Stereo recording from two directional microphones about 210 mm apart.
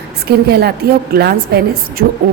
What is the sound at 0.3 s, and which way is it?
A woman's voice, 50° right (ahead or behind).